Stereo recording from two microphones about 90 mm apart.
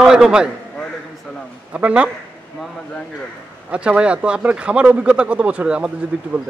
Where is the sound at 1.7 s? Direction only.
15° right (ahead or behind).